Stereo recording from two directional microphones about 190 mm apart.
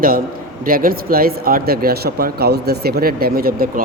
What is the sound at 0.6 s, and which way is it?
Speech, 50° right (ahead or behind).